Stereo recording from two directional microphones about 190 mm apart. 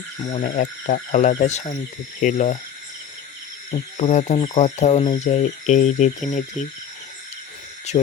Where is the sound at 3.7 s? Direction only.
30° left (ahead or behind).